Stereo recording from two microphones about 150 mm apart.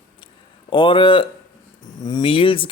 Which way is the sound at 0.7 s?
35° left (ahead or behind).